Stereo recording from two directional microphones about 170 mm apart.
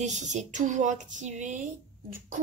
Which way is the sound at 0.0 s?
45° right (ahead or behind).